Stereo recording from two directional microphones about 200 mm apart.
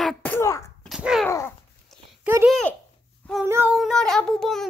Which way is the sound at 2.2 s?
10° right (ahead or behind).